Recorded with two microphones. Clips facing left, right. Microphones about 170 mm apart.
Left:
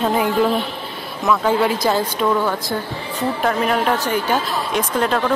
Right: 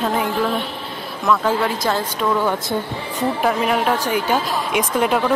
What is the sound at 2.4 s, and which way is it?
Speech, 20° right (ahead or behind).